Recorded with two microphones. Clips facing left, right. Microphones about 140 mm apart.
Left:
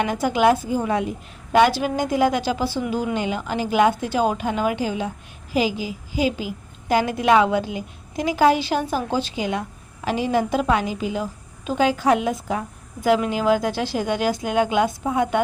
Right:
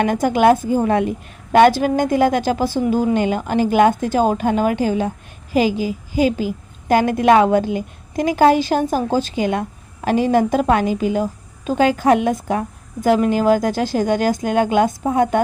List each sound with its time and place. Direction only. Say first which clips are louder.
0.0 s a woman's voice: right 4 dB; 50° right (ahead or behind)
13.1 s a woman's voice: right 4 dB; 45° right (ahead or behind)